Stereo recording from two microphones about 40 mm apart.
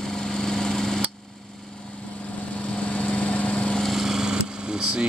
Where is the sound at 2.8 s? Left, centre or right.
Left.